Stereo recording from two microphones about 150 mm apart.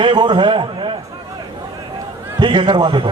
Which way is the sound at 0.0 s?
30° right (ahead or behind).